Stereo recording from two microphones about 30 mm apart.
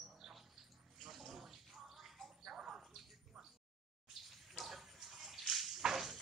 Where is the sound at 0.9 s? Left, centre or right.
Centre.